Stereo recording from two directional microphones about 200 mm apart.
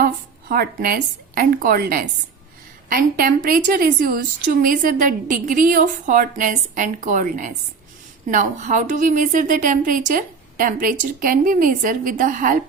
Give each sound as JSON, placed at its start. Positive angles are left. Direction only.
{"t": 0.0, "sound": "a woman's voice", "side_deg": -50}